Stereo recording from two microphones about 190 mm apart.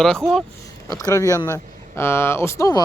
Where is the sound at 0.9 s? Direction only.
20° left (ahead or behind).